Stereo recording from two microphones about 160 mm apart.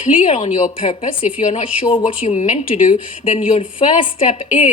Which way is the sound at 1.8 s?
30° left (ahead or behind).